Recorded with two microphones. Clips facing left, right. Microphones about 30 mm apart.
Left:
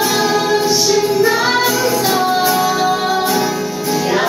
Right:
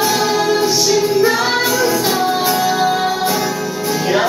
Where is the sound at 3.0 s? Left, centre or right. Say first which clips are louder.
Left 1 dB; centre.